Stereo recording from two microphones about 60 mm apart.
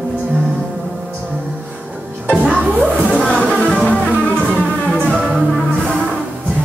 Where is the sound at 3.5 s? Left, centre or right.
Centre.